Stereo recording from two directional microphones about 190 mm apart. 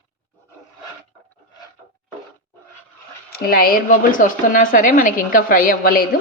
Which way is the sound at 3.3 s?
50° left (ahead or behind).